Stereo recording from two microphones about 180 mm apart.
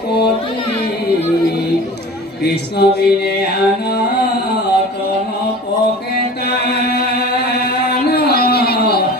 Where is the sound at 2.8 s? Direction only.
65° left (ahead or behind).